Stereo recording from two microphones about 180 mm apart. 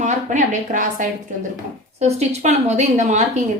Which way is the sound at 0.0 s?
45° right (ahead or behind).